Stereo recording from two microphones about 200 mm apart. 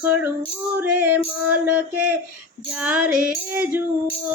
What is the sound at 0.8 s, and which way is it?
Music, 10° right (ahead or behind).